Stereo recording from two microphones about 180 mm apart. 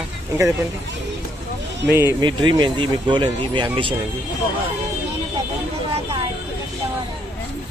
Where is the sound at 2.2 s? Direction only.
25° right (ahead or behind).